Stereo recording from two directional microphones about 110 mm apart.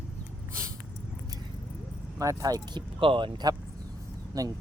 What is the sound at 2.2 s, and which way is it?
Speech, 30° right (ahead or behind).